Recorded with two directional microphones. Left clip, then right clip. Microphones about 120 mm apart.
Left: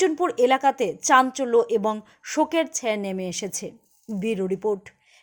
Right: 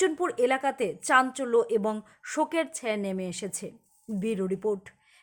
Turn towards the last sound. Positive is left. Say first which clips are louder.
# left 4 dB
turn(degrees=10)  # may be behind; listen again after turning